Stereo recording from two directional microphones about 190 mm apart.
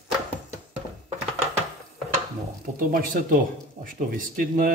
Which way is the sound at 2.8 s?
45° right (ahead or behind).